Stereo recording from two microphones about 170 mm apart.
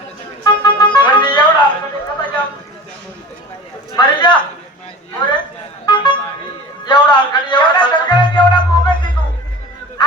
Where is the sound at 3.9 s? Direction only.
25° left (ahead or behind).